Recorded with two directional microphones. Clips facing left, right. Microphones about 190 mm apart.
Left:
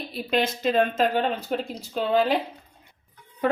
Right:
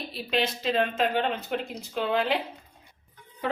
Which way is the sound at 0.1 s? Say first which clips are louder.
Left 4 dB; 45° left (ahead or behind).